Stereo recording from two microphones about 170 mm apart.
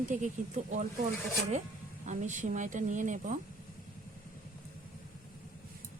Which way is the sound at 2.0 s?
45° right (ahead or behind).